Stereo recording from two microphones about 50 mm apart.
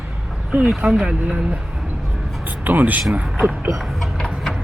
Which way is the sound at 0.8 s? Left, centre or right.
Centre.